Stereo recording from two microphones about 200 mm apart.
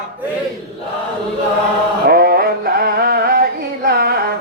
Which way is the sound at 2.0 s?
50° right (ahead or behind).